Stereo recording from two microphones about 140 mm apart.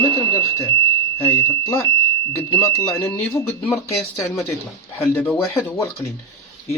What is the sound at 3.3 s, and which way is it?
Speech, 20° left (ahead or behind).